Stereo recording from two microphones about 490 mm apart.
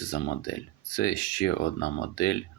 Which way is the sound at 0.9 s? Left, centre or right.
Left.